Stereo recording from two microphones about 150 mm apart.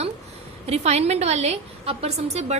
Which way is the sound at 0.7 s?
45° right (ahead or behind).